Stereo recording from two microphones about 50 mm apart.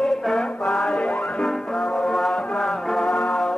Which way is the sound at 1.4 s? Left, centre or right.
Centre.